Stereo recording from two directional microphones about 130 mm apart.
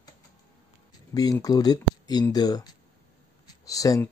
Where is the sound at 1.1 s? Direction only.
20° left (ahead or behind).